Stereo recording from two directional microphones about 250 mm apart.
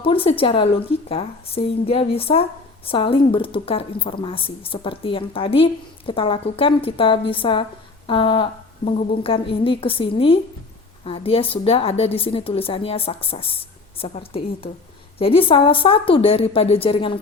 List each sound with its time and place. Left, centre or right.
0.0 s speech: left